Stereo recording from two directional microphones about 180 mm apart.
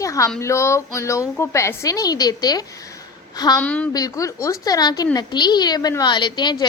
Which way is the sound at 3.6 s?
5° left (ahead or behind).